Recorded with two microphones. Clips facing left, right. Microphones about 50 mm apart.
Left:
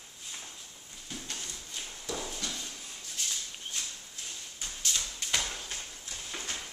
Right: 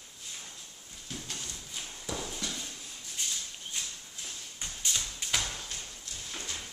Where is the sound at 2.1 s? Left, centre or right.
Centre.